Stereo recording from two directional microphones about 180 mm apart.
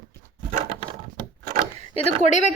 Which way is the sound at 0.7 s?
30° right (ahead or behind).